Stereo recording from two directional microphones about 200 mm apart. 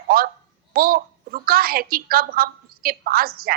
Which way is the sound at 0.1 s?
45° right (ahead or behind).